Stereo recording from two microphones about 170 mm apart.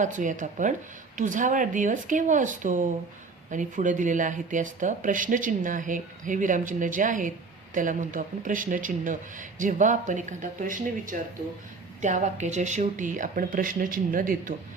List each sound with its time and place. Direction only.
0.0 s speech: 50° right (ahead or behind)